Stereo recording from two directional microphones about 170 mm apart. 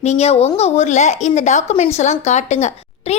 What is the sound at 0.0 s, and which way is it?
Speech, 40° left (ahead or behind).